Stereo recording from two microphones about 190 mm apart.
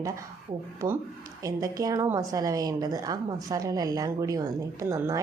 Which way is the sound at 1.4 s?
20° right (ahead or behind).